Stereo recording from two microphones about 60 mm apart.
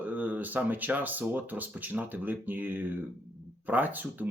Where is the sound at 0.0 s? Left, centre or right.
Right.